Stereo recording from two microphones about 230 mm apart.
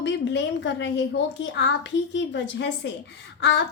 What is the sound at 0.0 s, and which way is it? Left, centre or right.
A woman's voice, left.